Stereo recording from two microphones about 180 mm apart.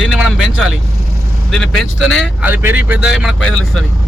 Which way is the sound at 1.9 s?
90° left.